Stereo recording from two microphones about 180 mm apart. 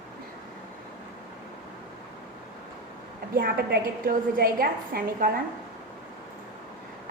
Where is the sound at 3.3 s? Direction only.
55° right (ahead or behind).